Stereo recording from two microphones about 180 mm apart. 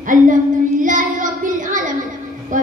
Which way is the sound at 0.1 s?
45° right (ahead or behind).